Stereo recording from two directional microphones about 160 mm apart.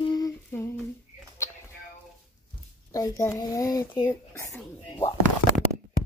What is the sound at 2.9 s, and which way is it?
A child's voice, 20° left (ahead or behind).